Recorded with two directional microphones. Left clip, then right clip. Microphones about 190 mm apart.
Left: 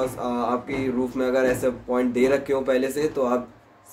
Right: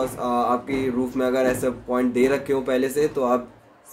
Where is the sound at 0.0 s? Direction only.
5° right (ahead or behind).